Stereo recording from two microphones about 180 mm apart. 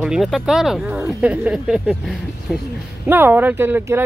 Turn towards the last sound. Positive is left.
turn(degrees=-10)  # may be behind; listen again after turning